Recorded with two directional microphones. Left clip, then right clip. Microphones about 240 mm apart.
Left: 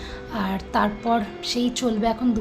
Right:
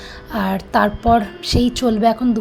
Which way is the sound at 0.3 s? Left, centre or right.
Right.